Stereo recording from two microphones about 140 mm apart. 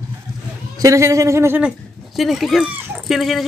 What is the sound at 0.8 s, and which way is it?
Speech, 20° right (ahead or behind).